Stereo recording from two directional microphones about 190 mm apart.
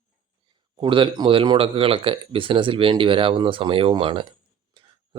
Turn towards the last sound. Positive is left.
turn(degrees=-25)  # may be behind; listen again after turning